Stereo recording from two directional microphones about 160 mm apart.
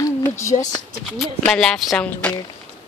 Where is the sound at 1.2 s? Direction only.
5° left (ahead or behind).